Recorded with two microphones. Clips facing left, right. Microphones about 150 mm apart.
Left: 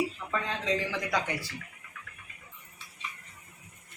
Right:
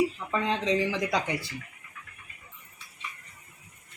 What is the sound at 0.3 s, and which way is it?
Speech, 20° right (ahead or behind).